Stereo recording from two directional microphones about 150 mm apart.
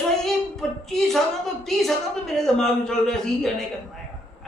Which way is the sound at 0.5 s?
5° left (ahead or behind).